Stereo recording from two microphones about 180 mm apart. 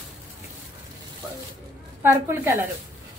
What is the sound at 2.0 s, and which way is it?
Speech, 10° right (ahead or behind).